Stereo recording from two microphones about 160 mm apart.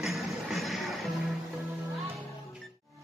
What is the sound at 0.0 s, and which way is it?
Music, centre (ahead or behind).